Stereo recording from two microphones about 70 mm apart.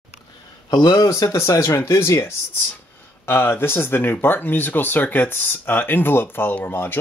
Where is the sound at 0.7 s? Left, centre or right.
Left.